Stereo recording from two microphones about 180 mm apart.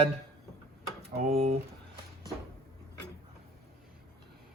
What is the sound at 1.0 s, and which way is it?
Speech, 35° right (ahead or behind).